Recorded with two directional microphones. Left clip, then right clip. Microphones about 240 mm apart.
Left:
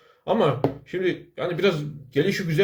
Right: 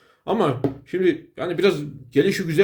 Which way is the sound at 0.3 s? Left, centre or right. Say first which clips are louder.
Even; right.